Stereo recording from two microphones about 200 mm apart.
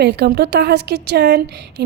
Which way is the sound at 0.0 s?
55° right (ahead or behind).